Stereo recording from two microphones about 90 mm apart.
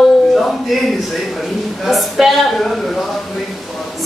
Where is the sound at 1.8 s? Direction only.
Centre (ahead or behind).